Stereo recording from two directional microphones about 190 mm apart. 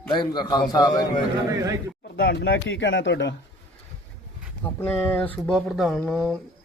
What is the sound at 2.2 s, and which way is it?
Speech, 60° left (ahead or behind).